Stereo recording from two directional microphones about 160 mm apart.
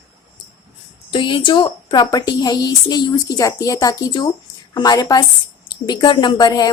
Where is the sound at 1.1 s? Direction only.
30° left (ahead or behind).